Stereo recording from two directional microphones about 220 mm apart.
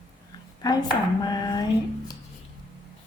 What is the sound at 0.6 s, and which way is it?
Dishes, 20° left (ahead or behind).